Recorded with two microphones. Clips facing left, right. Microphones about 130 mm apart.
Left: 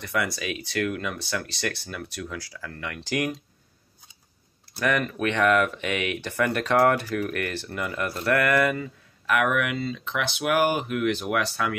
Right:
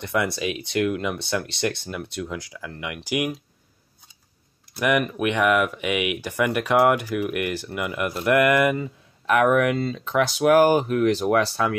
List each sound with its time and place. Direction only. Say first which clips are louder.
0.0 s speech: right 4 dB; 25° right (ahead or behind)
4.7 s speech: right 3 dB; 15° right (ahead or behind); by 11.7 s 30° right (ahead or behind)